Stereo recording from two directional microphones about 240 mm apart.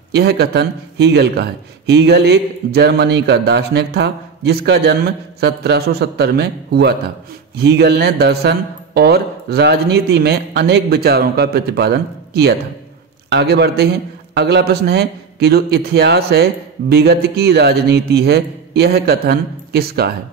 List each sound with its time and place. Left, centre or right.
0.1 s a man's voice: right